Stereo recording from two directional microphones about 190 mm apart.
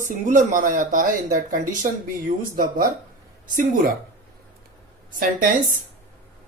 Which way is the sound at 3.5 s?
45° right (ahead or behind).